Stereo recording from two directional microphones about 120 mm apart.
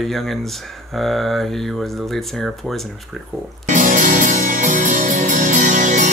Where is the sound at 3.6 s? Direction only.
90° right.